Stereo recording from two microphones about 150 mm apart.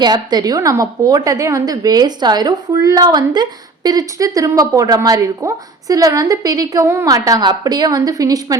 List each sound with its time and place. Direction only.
0.0 s a woman's voice: 30° right (ahead or behind)